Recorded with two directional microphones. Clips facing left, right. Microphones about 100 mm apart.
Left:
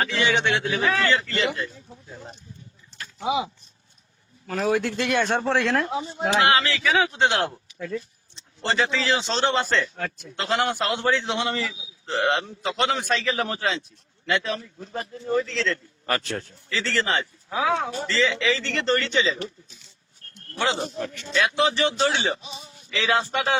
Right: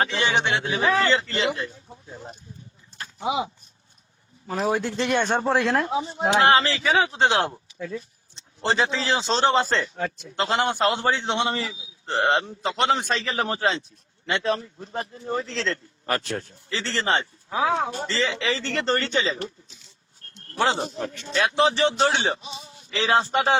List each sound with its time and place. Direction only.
0.0 s a man's voice: 25° right (ahead or behind)
3.2 s speech: centre (ahead or behind)
4.4 s a man's voice: 20° right (ahead or behind)
5.5 s speech: 5° right (ahead or behind)
6.1 s speech: 15° right (ahead or behind)
6.4 s a man's voice: 30° right (ahead or behind)
7.8 s speech: centre (ahead or behind)
8.6 s a man's voice: 35° right (ahead or behind)
16.0 s speech: 15° right (ahead or behind)
16.6 s a man's voice: 30° right (ahead or behind)
18.0 s a man's voice: 30° right (ahead or behind)
20.2 s a sound: 35° right (ahead or behind)
20.6 s a man's voice: 35° right (ahead or behind)